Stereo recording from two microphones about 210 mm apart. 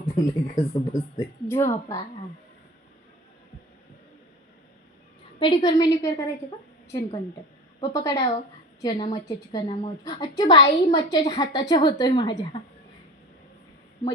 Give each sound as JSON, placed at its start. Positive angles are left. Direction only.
{"t": 0.0, "sound": "a woman's voice", "side_deg": 15}
{"t": 5.4, "sound": "a woman's voice", "side_deg": 20}
{"t": 7.8, "sound": "a woman's voice", "side_deg": 15}